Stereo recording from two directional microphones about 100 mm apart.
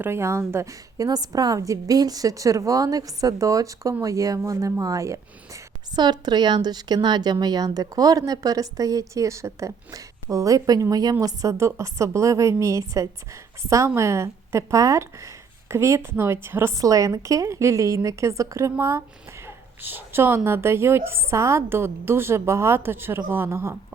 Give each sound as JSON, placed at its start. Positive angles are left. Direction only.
{"t": 0.0, "sound": "a woman's voice", "side_deg": -25}
{"t": 6.0, "sound": "a woman's voice", "side_deg": -45}